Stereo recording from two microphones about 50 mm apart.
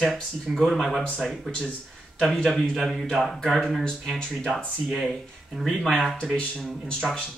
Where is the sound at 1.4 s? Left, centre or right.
Centre.